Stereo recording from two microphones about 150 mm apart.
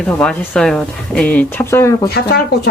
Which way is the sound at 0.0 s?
5° left (ahead or behind).